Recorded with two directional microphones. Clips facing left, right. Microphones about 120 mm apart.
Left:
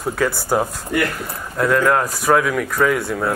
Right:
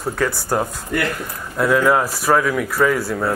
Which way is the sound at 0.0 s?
Centre (ahead or behind).